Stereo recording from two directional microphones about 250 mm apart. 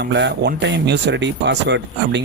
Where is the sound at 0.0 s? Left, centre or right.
Right.